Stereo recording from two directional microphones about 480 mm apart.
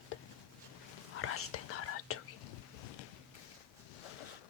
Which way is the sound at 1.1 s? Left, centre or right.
Left.